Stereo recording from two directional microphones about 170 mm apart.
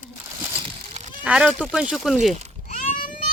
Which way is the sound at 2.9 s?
50° left (ahead or behind).